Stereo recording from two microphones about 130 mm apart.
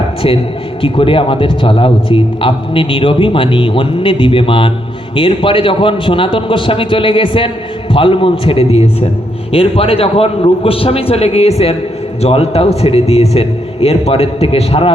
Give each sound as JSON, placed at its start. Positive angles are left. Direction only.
{"t": 0.8, "sound": "a man's voice", "side_deg": 45}